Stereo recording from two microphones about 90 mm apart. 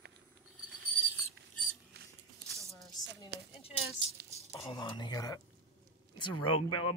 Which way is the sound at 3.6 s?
90° left.